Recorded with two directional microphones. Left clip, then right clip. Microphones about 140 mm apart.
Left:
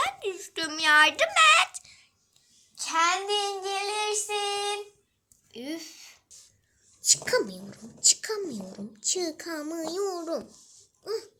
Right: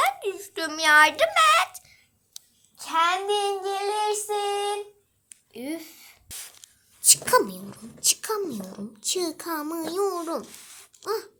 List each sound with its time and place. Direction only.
0.0 s dog: 5° left (ahead or behind)
2.7 s a child's voice: 5° right (ahead or behind)
4.4 s a sound: 5° right (ahead or behind)
7.3 s speech: 15° right (ahead or behind)
11.0 s dog: 15° right (ahead or behind)